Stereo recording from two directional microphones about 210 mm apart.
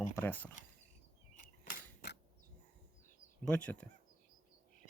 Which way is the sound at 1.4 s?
40° left (ahead or behind).